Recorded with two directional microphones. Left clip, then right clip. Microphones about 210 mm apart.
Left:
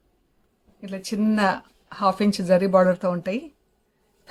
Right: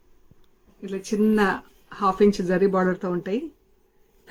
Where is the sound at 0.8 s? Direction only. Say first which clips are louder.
Right 4 dB; 40° left (ahead or behind).